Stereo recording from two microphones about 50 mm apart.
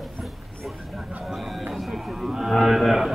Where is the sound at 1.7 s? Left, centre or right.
Centre.